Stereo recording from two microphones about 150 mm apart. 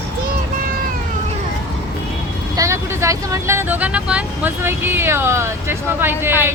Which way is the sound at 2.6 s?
20° right (ahead or behind).